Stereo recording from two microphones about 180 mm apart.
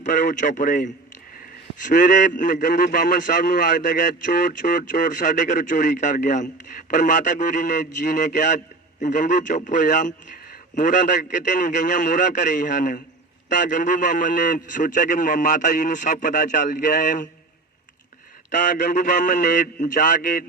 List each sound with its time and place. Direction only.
0.0 s a man's voice: 45° left (ahead or behind)
18.5 s a man's voice: 45° left (ahead or behind)